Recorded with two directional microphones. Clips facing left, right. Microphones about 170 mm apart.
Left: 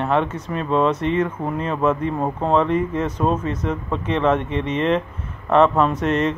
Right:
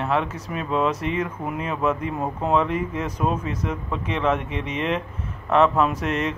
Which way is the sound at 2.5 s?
5° right (ahead or behind).